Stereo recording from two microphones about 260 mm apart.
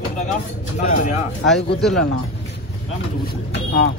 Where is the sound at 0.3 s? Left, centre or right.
Left.